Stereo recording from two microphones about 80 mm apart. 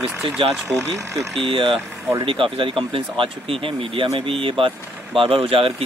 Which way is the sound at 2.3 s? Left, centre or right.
Right.